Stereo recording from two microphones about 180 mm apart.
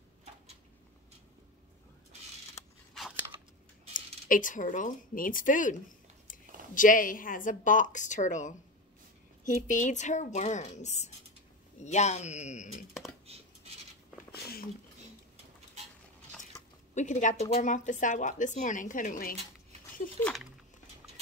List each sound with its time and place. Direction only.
3.9 s speech: 50° left (ahead or behind)
6.3 s a sound: 50° left (ahead or behind)
6.7 s speech: 50° left (ahead or behind)
13.3 s scratch: 35° right (ahead or behind)
14.3 s a sound: 60° left (ahead or behind)
16.9 s speech: 45° left (ahead or behind)
20.2 s speech: 5° left (ahead or behind)